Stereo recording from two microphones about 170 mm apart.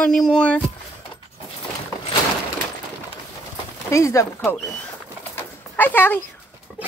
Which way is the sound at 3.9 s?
15° left (ahead or behind).